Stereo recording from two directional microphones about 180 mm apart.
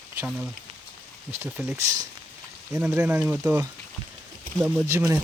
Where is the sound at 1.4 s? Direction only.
15° right (ahead or behind).